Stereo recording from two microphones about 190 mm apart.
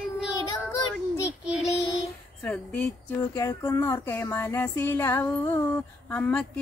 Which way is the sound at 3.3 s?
15° left (ahead or behind).